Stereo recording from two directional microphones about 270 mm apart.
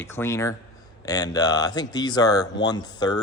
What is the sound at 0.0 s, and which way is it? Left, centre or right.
Speech, centre.